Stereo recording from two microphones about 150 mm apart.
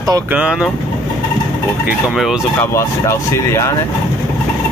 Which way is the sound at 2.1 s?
5° right (ahead or behind).